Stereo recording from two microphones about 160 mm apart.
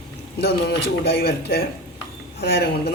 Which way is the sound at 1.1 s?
85° left.